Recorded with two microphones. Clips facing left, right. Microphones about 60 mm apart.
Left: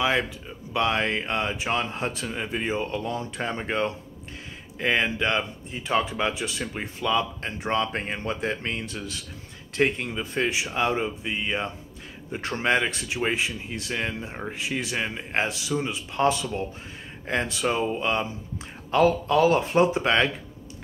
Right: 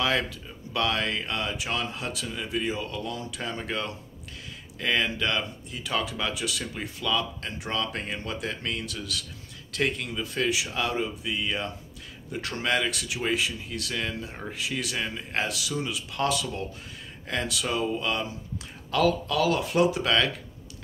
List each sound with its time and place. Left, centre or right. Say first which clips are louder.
0.0 s speech: left 2 dB; centre